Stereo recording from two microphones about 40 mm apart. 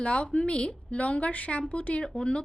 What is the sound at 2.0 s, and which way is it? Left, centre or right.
Speech, left.